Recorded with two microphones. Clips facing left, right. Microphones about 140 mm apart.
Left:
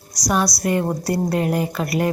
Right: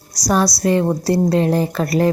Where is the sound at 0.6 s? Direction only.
25° right (ahead or behind).